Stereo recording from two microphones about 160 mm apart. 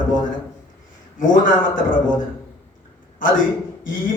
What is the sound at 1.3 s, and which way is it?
Speech, 55° left (ahead or behind).